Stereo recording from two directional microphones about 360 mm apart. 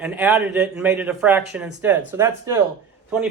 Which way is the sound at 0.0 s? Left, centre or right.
Centre.